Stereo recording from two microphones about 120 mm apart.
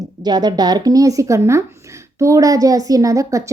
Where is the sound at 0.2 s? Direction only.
35° right (ahead or behind).